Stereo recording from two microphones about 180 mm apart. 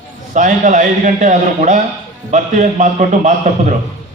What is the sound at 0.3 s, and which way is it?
A man's voice, 45° right (ahead or behind).